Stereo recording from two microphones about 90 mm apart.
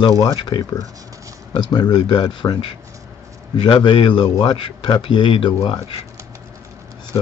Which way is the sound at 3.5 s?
65° left (ahead or behind).